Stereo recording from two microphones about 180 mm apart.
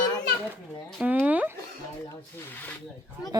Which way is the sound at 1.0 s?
10° right (ahead or behind).